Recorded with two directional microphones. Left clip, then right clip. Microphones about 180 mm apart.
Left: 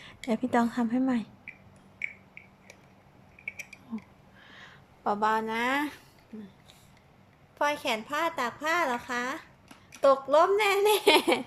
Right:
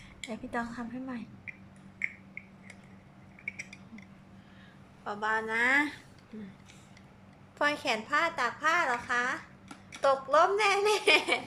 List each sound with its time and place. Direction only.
0.2 s a woman's voice: 25° left (ahead or behind)
5.0 s a woman's voice: 25° left (ahead or behind)
7.6 s a woman's voice: 15° left (ahead or behind); by 11.4 s 30° left (ahead or behind)